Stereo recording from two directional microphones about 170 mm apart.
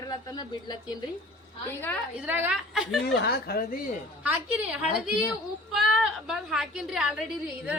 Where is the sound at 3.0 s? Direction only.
75° left (ahead or behind).